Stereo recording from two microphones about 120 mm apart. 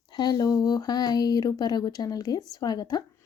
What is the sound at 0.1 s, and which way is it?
A woman's voice, 35° left (ahead or behind).